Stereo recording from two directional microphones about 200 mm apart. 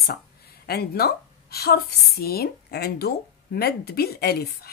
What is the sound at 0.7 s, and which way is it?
A woman's voice, 50° left (ahead or behind).